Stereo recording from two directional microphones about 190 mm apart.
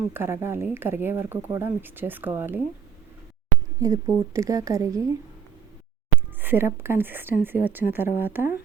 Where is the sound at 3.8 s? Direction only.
15° right (ahead or behind).